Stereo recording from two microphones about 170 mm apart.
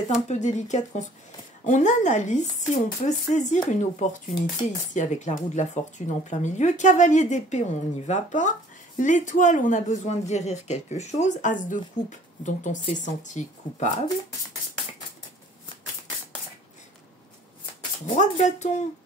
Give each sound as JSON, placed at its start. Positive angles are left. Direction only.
{"t": 0.3, "sound": "speech", "side_deg": 45}
{"t": 18.0, "sound": "speech", "side_deg": 50}